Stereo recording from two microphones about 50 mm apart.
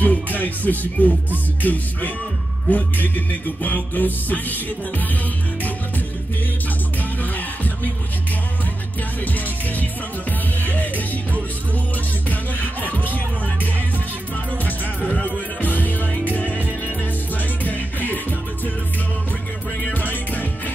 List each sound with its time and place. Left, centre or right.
0.0 s music: left
7.0 s music: left
9.2 s music: left
12.3 s music: left
12.9 s music: right
15.2 s music: left
17.6 s music: left
19.8 s music: left